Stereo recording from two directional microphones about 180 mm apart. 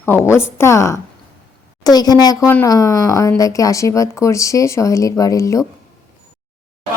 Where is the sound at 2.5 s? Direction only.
10° left (ahead or behind).